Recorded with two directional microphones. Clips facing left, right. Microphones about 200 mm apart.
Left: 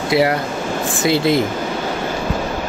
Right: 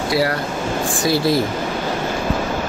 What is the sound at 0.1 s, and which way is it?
Speech, 20° left (ahead or behind).